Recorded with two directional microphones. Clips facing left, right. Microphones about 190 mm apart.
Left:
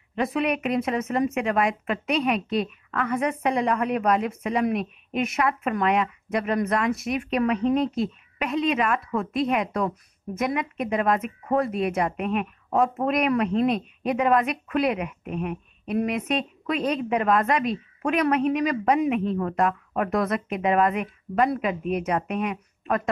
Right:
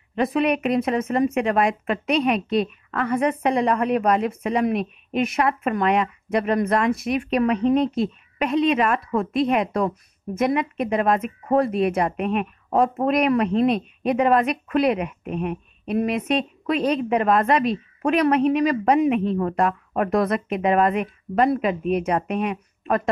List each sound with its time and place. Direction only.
0.1 s speech: 35° right (ahead or behind)